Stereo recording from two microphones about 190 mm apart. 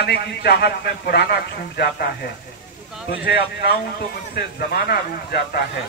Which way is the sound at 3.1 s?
55° left (ahead or behind).